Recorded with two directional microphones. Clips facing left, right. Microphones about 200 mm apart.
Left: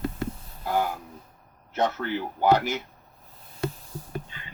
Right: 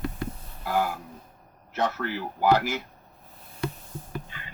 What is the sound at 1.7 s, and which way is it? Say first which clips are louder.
Speech: left 2 dB; 25° left (ahead or behind).